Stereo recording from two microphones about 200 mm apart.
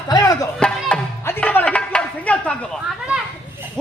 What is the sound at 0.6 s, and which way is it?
Music, 10° left (ahead or behind).